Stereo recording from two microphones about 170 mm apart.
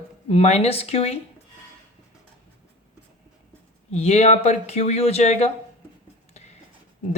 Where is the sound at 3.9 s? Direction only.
40° left (ahead or behind).